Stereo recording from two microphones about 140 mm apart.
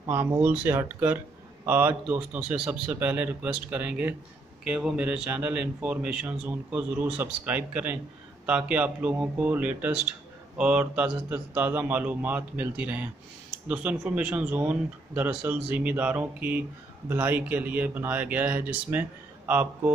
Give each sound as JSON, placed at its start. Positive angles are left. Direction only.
{"t": 0.1, "sound": "a man's voice", "side_deg": -15}